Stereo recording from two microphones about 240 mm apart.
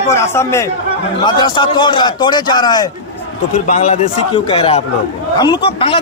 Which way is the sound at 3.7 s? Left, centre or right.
Left.